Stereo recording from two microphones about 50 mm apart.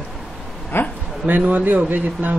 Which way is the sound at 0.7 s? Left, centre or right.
Left.